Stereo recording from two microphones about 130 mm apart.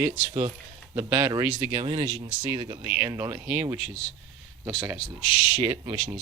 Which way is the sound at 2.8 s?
15° right (ahead or behind).